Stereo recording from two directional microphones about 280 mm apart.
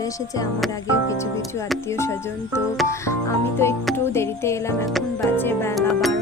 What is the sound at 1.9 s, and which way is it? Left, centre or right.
Music, centre.